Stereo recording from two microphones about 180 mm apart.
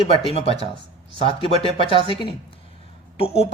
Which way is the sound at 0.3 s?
35° left (ahead or behind).